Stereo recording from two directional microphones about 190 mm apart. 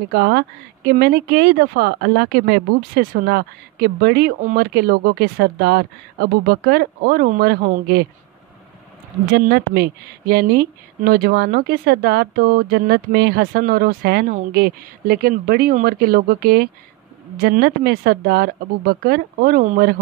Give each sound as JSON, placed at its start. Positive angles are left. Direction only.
{"t": 0.1, "sound": "speech", "side_deg": -60}
{"t": 7.2, "sound": "speech", "side_deg": -45}
{"t": 9.2, "sound": "speech", "side_deg": -55}